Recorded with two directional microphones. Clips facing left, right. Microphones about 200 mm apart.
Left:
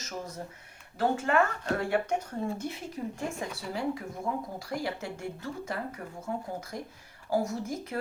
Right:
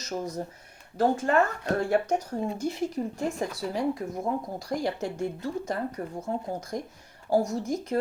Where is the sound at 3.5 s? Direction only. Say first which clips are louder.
Right 4 dB; 40° right (ahead or behind).